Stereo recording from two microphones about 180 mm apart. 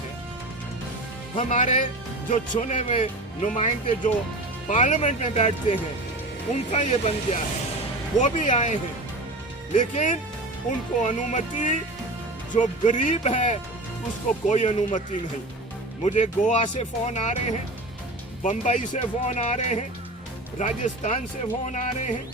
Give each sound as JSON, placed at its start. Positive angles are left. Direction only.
{"t": 1.4, "sound": "speech", "side_deg": 40}
{"t": 16.0, "sound": "speech", "side_deg": 40}
{"t": 18.4, "sound": "speech", "side_deg": 40}